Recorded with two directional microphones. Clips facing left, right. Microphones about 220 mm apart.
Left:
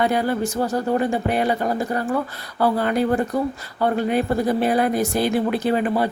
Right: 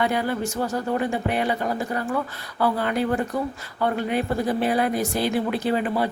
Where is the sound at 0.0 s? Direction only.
40° left (ahead or behind).